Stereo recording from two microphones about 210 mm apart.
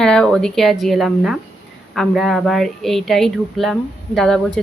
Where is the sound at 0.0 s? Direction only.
5° left (ahead or behind).